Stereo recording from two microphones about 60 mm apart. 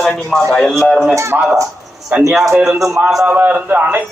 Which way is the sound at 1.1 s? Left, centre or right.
Right.